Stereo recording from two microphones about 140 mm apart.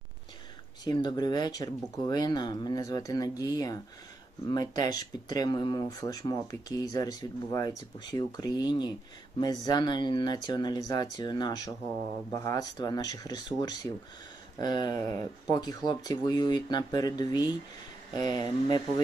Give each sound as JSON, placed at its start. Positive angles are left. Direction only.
{"t": 0.9, "sound": "speech", "side_deg": 30}
{"t": 4.4, "sound": "speech", "side_deg": 30}